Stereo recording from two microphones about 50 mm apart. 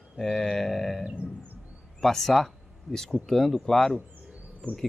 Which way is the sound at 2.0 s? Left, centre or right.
Centre.